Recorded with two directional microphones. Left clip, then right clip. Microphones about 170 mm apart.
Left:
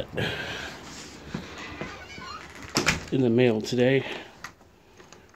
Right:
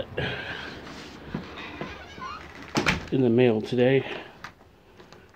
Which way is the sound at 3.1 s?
10° left (ahead or behind).